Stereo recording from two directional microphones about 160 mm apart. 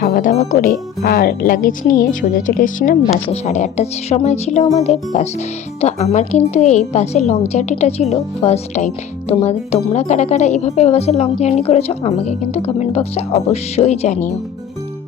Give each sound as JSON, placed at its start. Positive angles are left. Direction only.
{"t": 0.0, "sound": "a woman's voice", "side_deg": 60}
{"t": 1.0, "sound": "a woman's voice", "side_deg": 75}